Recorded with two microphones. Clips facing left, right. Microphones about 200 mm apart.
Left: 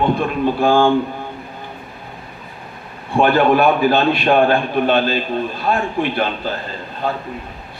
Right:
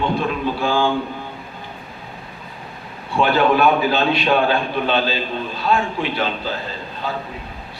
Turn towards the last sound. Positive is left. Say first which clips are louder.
# left 3 dB
turn(degrees=55)  # may be behind; listen again after turning